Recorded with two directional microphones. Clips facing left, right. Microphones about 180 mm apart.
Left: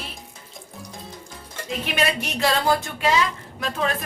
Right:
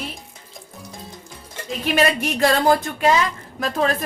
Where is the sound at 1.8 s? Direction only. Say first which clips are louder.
Right 7 dB; 45° right (ahead or behind).